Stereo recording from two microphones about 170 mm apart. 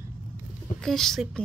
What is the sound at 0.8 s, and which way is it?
Speech, centre (ahead or behind).